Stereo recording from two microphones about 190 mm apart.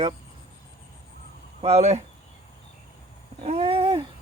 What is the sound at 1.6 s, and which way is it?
Speech, 35° right (ahead or behind).